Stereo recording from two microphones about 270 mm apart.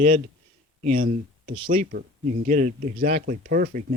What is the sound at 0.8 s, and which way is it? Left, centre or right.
Speech, right.